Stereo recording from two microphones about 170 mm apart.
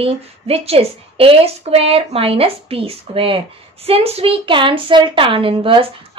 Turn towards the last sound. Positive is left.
turn(degrees=-30)  # may be behind; listen again after turning